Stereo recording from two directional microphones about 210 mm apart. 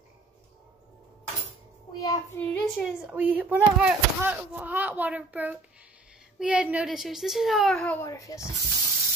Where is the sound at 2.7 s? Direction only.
5° right (ahead or behind); by 8.5 s 15° left (ahead or behind).